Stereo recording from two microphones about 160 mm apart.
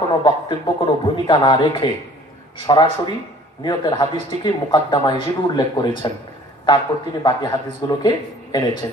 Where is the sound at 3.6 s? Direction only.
25° left (ahead or behind).